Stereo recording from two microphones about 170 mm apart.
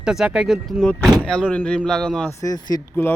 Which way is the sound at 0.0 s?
5° right (ahead or behind).